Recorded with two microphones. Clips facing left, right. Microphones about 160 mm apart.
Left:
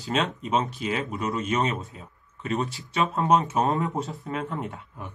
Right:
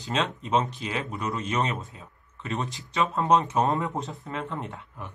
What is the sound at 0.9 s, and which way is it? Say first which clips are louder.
Speech: even; centre (ahead or behind).